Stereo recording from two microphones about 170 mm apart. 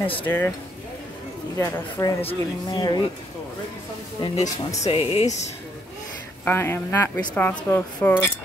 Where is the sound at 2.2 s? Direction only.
30° left (ahead or behind).